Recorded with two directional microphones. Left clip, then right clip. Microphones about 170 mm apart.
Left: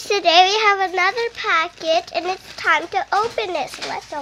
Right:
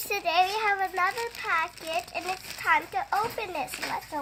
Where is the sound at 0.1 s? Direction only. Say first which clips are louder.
Left 11 dB; 45° left (ahead or behind).